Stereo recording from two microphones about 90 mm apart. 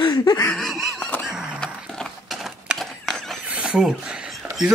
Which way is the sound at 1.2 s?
10° right (ahead or behind).